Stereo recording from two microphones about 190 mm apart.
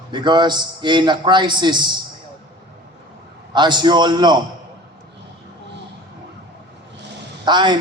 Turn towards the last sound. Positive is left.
turn(degrees=-25)  # may be behind; listen again after turning